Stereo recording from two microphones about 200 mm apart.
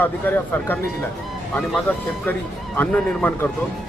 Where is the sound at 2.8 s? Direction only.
10° left (ahead or behind).